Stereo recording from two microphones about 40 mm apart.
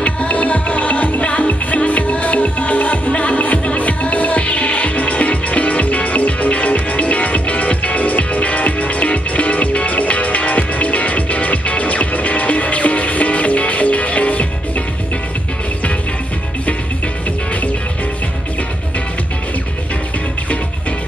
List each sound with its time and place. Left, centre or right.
0.0 s music: left